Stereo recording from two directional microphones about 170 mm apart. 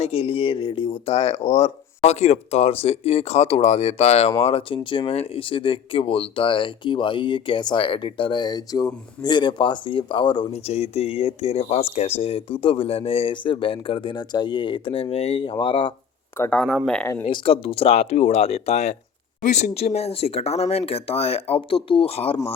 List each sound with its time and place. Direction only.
0.0 s speech: 35° left (ahead or behind)
16.4 s speech: 5° left (ahead or behind)
17.2 s speech: 30° left (ahead or behind)